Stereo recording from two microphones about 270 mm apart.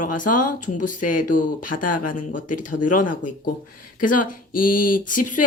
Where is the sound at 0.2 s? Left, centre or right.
Left.